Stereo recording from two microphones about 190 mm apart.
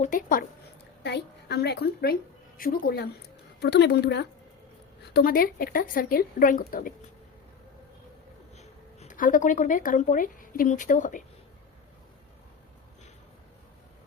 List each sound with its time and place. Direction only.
0.0 s a woman's voice: 45° left (ahead or behind)
1.0 s a woman's voice: 60° left (ahead or behind)
5.1 s a woman's voice: 50° left (ahead or behind)
8.5 s a woman's voice: 40° left (ahead or behind)